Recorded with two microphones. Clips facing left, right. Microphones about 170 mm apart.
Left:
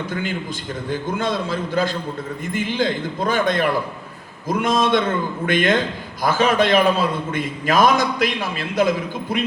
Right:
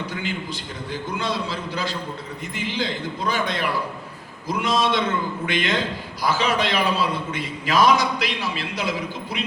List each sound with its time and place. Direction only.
0.1 s a man's voice: 50° left (ahead or behind)